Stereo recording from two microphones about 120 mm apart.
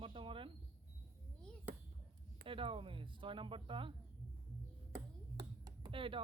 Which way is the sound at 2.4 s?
50° right (ahead or behind).